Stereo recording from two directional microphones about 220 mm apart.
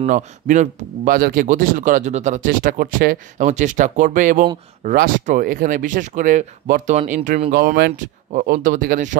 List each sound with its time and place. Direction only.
0.0 s speech: 35° right (ahead or behind)
7.5 s speech: 50° right (ahead or behind)
8.0 s speech: 35° right (ahead or behind)